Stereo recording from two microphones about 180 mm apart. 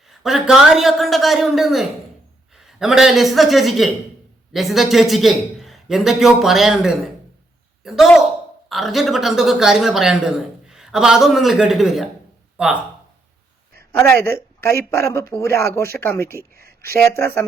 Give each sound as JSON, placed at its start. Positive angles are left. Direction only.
{"t": 0.1, "sound": "a woman's voice", "side_deg": 0}
{"t": 13.9, "sound": "speech", "side_deg": 15}
{"t": 16.6, "sound": "a sound", "side_deg": -60}
{"t": 16.9, "sound": "speech", "side_deg": 15}